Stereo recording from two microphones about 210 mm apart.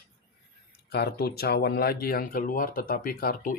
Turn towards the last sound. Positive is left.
turn(degrees=45)  # may be behind; listen again after turning